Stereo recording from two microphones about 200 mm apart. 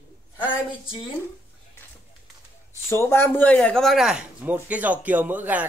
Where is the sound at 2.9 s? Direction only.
10° left (ahead or behind).